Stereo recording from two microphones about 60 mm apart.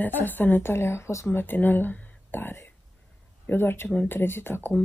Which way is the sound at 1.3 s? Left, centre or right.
Left.